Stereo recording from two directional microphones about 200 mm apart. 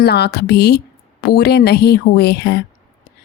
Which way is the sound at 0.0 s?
55° left (ahead or behind).